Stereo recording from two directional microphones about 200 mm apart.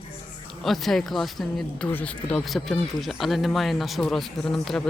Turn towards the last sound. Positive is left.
turn(degrees=0)  # may be behind; listen again after turning